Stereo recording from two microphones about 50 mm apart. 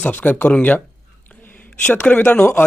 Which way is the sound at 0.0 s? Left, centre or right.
Left.